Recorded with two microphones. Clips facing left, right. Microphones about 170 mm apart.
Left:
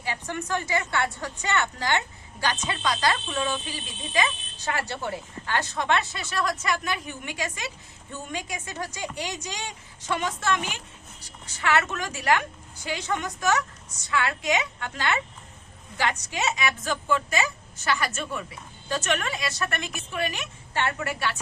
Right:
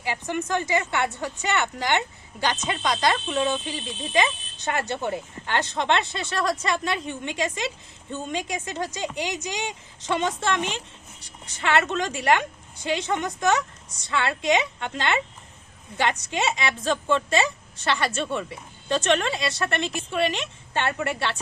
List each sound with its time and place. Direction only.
0.0 s speech: 20° right (ahead or behind)